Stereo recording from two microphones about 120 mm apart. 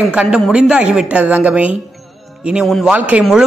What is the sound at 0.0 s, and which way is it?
Speech, 5° right (ahead or behind).